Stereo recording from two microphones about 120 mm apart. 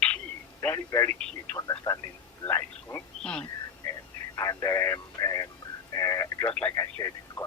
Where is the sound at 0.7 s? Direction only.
25° left (ahead or behind).